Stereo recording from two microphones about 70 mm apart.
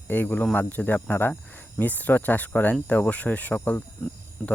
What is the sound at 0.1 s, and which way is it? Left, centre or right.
Speech, left.